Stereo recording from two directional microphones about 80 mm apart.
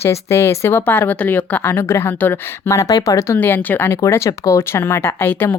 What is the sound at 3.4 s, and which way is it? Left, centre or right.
A woman's voice, left.